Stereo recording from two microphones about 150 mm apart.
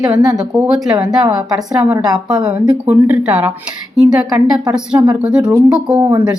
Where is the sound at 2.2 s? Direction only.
5° right (ahead or behind).